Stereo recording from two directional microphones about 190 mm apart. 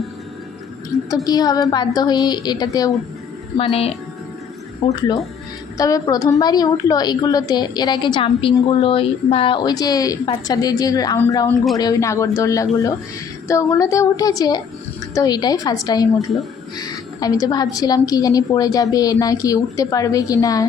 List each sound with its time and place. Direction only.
1.1 s a woman's voice: 20° left (ahead or behind)
3.6 s a woman's voice: 30° left (ahead or behind)
5.7 s a woman's voice: 20° left (ahead or behind)